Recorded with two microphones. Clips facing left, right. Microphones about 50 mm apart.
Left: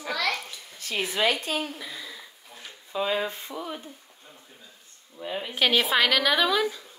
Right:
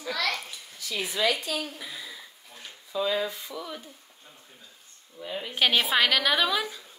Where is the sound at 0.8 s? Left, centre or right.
Left.